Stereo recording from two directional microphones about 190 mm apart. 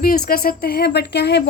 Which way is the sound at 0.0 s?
50° left (ahead or behind).